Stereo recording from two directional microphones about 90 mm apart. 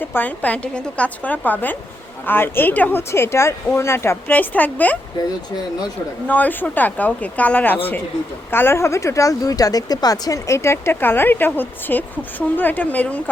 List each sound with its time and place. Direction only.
0.0 s a woman's voice: 20° left (ahead or behind)
3.1 s speech: 30° left (ahead or behind)
4.3 s speech: 20° left (ahead or behind)
6.2 s speech: 15° left (ahead or behind)